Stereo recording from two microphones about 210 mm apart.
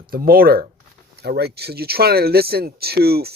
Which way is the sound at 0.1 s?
45° right (ahead or behind).